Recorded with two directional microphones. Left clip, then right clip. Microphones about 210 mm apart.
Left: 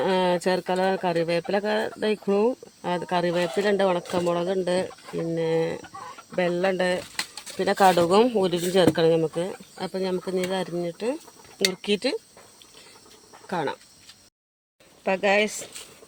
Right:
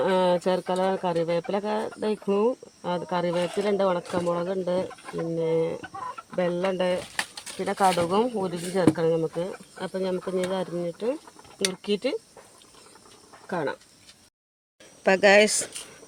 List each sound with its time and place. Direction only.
0.0 s speech: 15° left (ahead or behind)
7.6 s speech: 35° left (ahead or behind)
13.5 s speech: 20° left (ahead or behind)
15.0 s speech: 55° right (ahead or behind)